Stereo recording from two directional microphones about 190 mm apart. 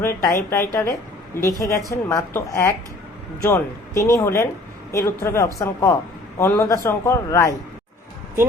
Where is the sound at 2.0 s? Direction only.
15° left (ahead or behind).